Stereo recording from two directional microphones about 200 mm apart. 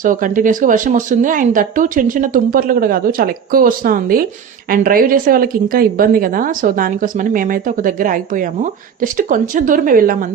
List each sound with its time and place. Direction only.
0.0 s speech: 40° right (ahead or behind)